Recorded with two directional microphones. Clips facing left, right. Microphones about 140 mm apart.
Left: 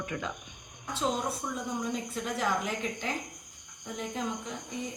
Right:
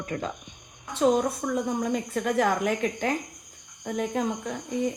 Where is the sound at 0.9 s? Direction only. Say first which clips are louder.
Right 9 dB; 55° right (ahead or behind).